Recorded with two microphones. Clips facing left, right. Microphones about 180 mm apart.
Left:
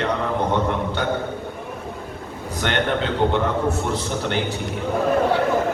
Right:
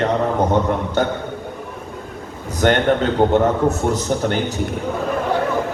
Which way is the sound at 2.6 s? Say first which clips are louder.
Right 7 dB; 45° right (ahead or behind).